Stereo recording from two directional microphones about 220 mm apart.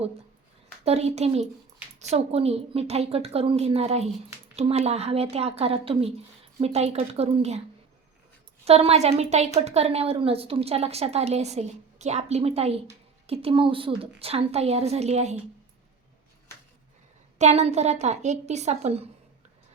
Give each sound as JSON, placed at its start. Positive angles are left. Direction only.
{"t": 0.9, "sound": "a woman's voice", "side_deg": -30}
{"t": 8.6, "sound": "a woman's voice", "side_deg": -30}
{"t": 17.3, "sound": "a woman's voice", "side_deg": -30}